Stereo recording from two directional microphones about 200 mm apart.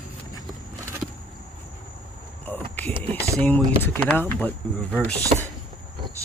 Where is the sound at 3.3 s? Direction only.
10° left (ahead or behind).